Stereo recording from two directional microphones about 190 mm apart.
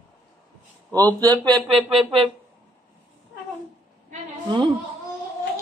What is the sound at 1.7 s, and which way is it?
Speech, centre (ahead or behind).